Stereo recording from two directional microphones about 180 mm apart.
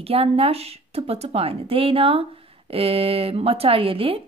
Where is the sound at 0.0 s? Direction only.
35° right (ahead or behind).